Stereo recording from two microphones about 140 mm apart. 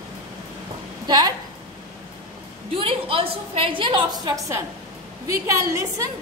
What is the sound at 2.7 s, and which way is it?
A woman's voice, 40° right (ahead or behind).